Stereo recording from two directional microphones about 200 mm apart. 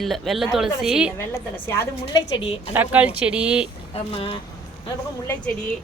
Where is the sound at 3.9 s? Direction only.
30° left (ahead or behind).